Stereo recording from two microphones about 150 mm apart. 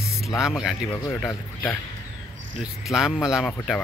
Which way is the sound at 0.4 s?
Centre (ahead or behind).